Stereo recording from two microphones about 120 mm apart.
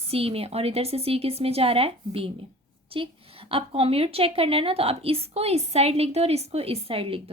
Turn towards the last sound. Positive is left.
turn(degrees=-50)  # may be behind; listen again after turning